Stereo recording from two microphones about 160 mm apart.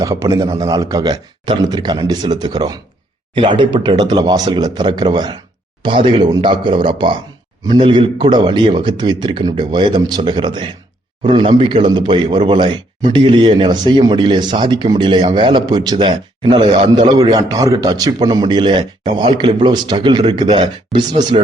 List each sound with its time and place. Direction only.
0.0 s a man's voice: 20° right (ahead or behind)